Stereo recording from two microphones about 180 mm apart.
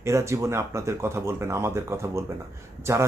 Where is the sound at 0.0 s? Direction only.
15° right (ahead or behind).